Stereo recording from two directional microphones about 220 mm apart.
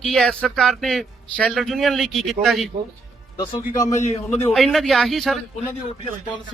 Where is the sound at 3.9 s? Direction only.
30° left (ahead or behind).